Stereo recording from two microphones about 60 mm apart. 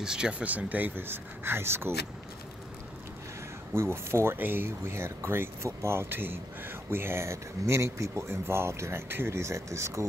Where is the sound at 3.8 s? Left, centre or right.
Right.